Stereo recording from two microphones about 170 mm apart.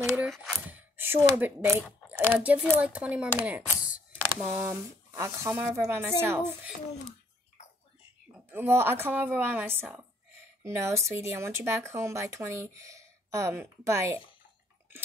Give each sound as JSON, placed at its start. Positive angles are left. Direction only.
{"t": 0.1, "sound": "a sound", "side_deg": -10}
{"t": 2.3, "sound": "speech", "side_deg": -10}
{"t": 8.5, "sound": "speech", "side_deg": -10}